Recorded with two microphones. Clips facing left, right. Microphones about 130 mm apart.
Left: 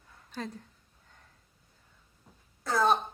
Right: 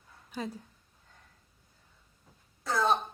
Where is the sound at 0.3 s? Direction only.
5° right (ahead or behind).